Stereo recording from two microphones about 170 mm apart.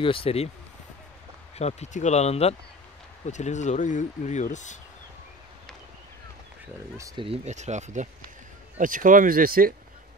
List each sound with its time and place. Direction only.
0.0 s speech: 30° left (ahead or behind)
1.6 s speech: 40° left (ahead or behind)
7.0 s speech: 20° right (ahead or behind)
7.2 s speech: 40° right (ahead or behind); by 9.8 s 60° right (ahead or behind)